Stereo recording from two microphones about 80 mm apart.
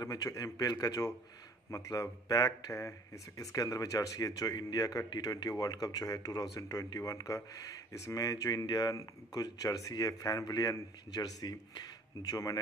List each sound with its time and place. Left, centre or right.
0.0 s speech: left